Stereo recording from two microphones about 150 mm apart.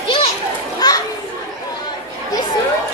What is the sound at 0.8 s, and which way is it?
Children playing, 25° left (ahead or behind).